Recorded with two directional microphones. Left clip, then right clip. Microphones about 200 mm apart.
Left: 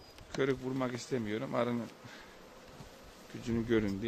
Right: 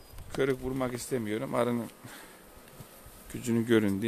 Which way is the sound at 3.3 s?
55° right (ahead or behind).